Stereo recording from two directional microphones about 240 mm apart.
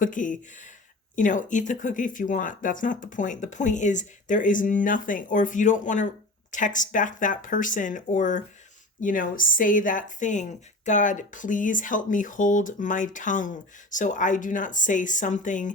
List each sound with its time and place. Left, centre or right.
0.0 s speech: left